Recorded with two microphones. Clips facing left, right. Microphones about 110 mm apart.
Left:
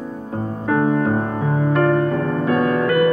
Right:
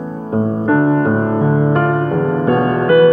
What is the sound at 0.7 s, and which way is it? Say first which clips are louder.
Music: right 3 dB; 40° right (ahead or behind).